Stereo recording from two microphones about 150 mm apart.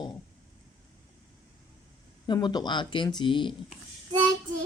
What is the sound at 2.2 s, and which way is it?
Speech, 30° left (ahead or behind).